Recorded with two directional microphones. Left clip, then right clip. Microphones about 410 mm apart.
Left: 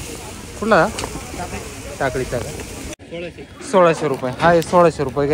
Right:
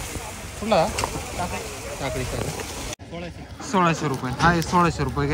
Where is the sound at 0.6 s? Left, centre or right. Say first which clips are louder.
Left 6 dB; left.